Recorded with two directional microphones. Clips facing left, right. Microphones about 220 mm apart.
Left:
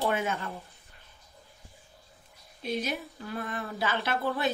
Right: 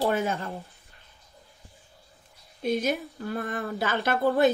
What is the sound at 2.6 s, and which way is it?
A woman's voice, 45° right (ahead or behind).